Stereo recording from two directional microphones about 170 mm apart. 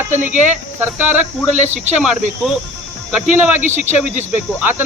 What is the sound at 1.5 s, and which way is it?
Speech, 45° right (ahead or behind).